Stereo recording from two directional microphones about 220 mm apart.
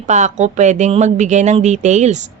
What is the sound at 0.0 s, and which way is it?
Speech, 30° right (ahead or behind).